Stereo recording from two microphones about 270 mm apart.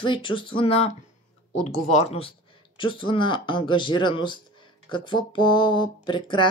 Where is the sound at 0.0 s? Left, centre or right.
Centre.